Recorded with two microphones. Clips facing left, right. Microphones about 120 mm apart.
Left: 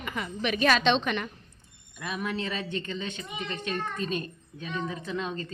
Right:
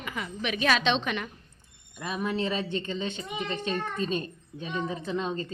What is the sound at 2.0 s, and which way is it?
A woman's voice, 25° right (ahead or behind).